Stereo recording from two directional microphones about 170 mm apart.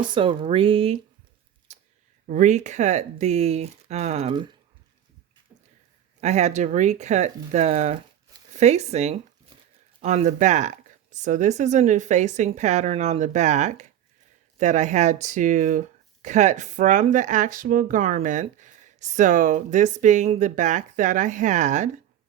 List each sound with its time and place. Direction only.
0.1 s speech: 30° right (ahead or behind)
1.7 s a sound: 40° right (ahead or behind)
2.2 s speech: 50° right (ahead or behind)
6.1 s speech: 40° right (ahead or behind)